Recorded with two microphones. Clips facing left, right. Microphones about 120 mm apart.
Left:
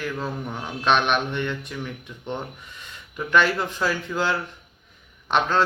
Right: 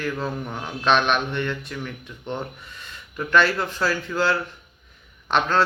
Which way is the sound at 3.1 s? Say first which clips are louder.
Right 1 dB; 15° left (ahead or behind).